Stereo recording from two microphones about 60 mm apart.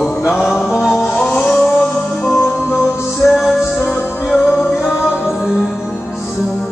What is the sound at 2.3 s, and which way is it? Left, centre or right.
Music, left.